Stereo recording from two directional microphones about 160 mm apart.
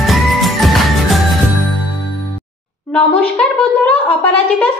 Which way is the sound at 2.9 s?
5° left (ahead or behind).